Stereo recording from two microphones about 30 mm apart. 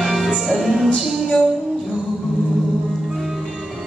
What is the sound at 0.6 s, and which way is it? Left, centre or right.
Music, centre.